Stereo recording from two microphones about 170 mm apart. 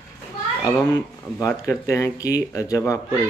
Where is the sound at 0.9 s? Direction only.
15° left (ahead or behind).